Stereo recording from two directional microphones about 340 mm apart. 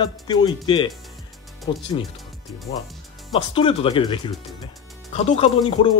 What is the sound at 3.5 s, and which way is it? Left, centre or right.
Speech, centre.